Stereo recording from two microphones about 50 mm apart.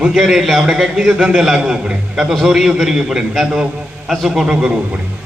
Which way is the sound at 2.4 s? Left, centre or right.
Centre.